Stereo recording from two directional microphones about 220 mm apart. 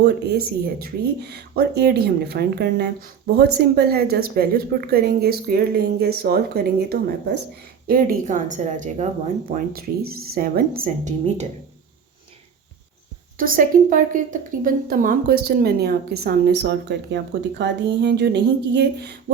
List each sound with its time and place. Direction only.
0.0 s a woman's voice: 45° right (ahead or behind)
13.3 s speech: 40° right (ahead or behind)